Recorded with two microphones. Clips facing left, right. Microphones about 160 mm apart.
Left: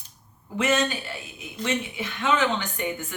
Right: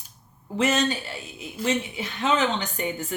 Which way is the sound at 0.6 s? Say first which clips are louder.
Right 1 dB; 30° right (ahead or behind).